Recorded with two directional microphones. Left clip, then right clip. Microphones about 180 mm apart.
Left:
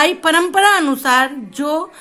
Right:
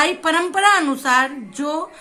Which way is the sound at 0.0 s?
40° left (ahead or behind).